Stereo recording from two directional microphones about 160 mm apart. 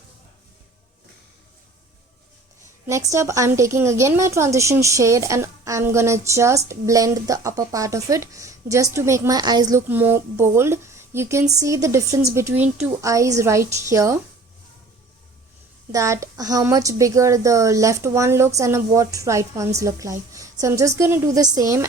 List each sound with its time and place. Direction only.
2.8 s a woman's voice: 20° right (ahead or behind)
9.9 s a woman's voice: 15° right (ahead or behind)
15.9 s a woman's voice: 20° right (ahead or behind)